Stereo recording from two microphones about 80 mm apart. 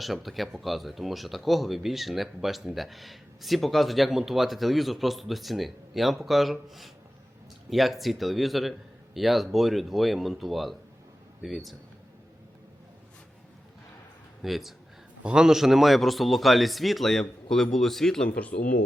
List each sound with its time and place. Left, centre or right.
0.0 s speech: centre
14.4 s speech: centre
18.3 s speech: centre